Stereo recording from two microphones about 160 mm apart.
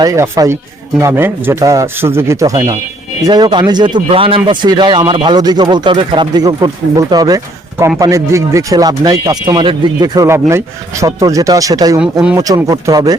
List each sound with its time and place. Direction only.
0.0 s speech: 20° right (ahead or behind)